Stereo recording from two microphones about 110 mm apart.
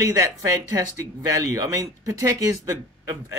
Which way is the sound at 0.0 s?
30° right (ahead or behind).